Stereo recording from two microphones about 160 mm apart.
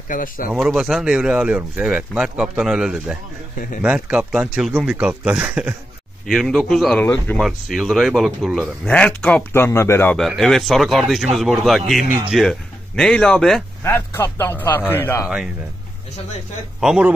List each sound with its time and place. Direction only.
0.1 s speech: 60° left (ahead or behind)
0.5 s speech: 5° right (ahead or behind)
7.4 s a man's voice: centre (ahead or behind); by 10.1 s 15° left (ahead or behind)
10.1 s speech: centre (ahead or behind)
13.8 s a man's voice: 15° left (ahead or behind)
15.2 s speech: 5° right (ahead or behind)
16.8 s speech: 5° right (ahead or behind)